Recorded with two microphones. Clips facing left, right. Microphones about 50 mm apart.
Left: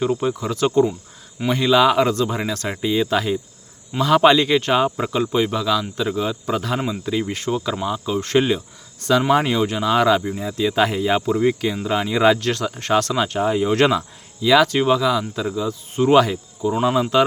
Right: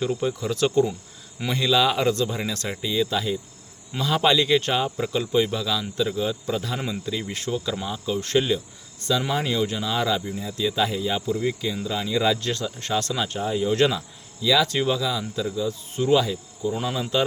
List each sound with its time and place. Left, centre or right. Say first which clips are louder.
0.0 s speech: left 4 dB; left
6.4 s speech: left 5 dB; left
6.7 s speech: left 5 dB; centre
7.0 s speech: left 6 dB; left
10.8 s speech: left 8 dB; left
16.1 s speech: left 6 dB; left
16.7 s speech: left 9 dB; left